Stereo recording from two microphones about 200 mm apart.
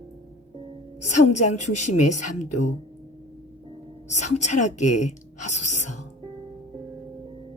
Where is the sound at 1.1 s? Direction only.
35° left (ahead or behind).